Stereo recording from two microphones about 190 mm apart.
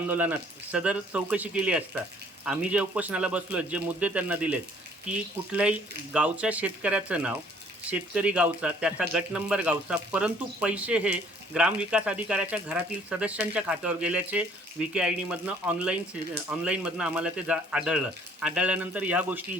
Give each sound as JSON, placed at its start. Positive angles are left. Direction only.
{"t": 0.1, "sound": "speech", "side_deg": -10}